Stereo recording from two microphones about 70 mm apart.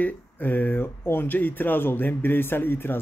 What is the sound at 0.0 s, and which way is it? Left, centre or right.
Speech, left.